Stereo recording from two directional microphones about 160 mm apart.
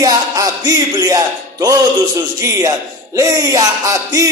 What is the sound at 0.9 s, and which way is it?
Speech, 20° right (ahead or behind).